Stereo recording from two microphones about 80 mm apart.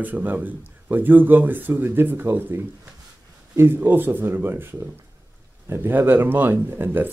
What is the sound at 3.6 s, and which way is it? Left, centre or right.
Speech, right.